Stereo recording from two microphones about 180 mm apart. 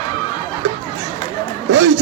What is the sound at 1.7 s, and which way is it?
Speech, 85° right.